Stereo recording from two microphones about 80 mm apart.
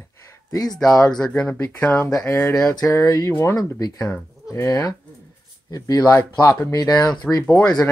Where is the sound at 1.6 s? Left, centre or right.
Left.